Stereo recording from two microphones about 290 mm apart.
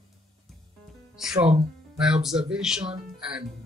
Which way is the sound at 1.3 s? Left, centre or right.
Centre.